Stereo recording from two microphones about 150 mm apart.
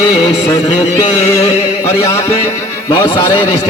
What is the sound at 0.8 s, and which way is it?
Music, 45° left (ahead or behind).